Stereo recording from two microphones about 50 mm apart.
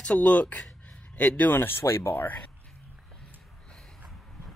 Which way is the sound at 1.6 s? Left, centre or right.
Left.